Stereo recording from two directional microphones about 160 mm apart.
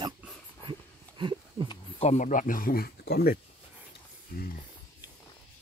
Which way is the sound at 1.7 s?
40° left (ahead or behind).